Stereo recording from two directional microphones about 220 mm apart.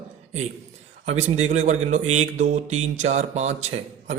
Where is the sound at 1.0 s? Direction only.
30° right (ahead or behind).